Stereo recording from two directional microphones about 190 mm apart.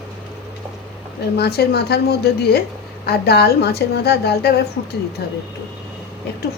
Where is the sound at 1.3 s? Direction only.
55° left (ahead or behind).